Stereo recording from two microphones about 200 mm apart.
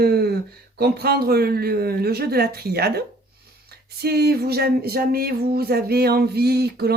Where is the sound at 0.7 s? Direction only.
50° right (ahead or behind).